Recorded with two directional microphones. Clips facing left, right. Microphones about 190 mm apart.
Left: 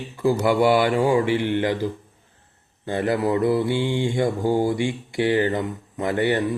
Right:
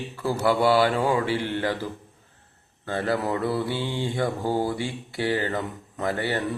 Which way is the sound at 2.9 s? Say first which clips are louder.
Left 4 dB; 15° left (ahead or behind).